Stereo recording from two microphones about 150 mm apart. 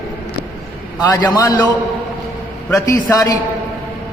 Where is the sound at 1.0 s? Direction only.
25° left (ahead or behind).